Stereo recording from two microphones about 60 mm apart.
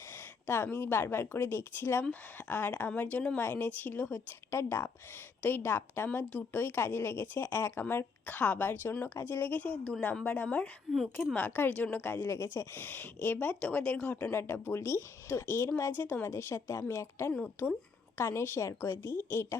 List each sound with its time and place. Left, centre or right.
0.1 s a woman's voice: left
3.3 s a woman's voice: left
4.5 s a woman's voice: left
5.4 s a woman's voice: left
8.3 s a woman's voice: left
10.9 s a woman's voice: centre
11.7 s a woman's voice: left
12.3 s a woman's voice: left
12.7 s speech: left
13.6 s a woman's voice: centre
14.3 s a woman's voice: left
15.9 s a woman's voice: left
17.6 s speech: left
18.2 s a woman's voice: left